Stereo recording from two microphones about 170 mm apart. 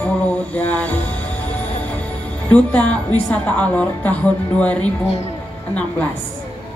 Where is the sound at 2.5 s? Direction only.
10° left (ahead or behind).